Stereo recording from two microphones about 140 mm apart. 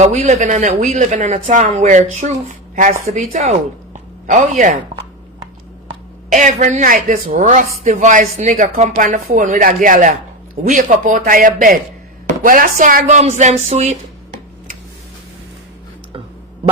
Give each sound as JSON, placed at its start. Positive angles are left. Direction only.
{"t": 0.0, "sound": "speech", "side_deg": -55}
{"t": 3.2, "sound": "speech", "side_deg": -55}
{"t": 6.3, "sound": "speech", "side_deg": -60}